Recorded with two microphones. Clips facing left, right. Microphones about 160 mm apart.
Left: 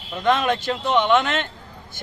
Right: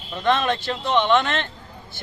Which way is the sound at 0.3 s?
5° left (ahead or behind).